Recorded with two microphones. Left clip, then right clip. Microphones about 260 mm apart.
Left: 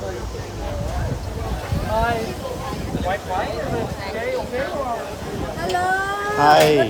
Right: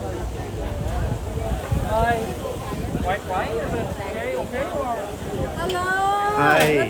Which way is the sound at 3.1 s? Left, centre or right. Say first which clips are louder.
Left 1 dB; left.